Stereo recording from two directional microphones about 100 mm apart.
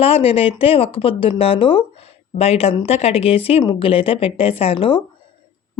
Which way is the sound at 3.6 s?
60° left (ahead or behind).